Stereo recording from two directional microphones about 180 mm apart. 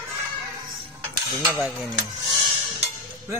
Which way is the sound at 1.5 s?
10° right (ahead or behind).